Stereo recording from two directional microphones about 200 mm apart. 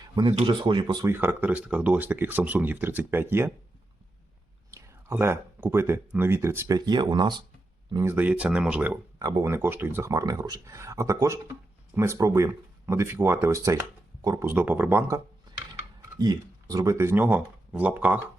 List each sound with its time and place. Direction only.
0.0 s a sound: 20° right (ahead or behind)
0.3 s speech: 25° right (ahead or behind)
1.1 s speech: 10° right (ahead or behind)
4.7 s speech: 10° right (ahead or behind)